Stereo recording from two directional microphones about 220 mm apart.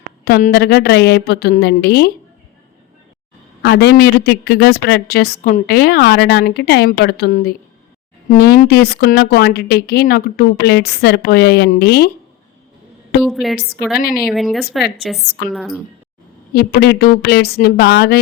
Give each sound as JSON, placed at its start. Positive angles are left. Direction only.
{"t": 0.3, "sound": "a woman's voice", "side_deg": 45}
{"t": 3.6, "sound": "a woman's voice", "side_deg": 50}
{"t": 13.2, "sound": "a woman's voice", "side_deg": 0}
{"t": 16.5, "sound": "a woman's voice", "side_deg": 45}